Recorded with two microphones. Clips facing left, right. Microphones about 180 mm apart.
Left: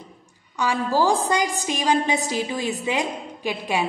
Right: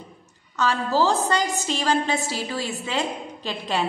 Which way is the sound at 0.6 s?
15° left (ahead or behind).